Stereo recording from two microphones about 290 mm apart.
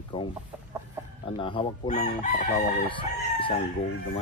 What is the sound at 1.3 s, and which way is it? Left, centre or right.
Chicken, centre.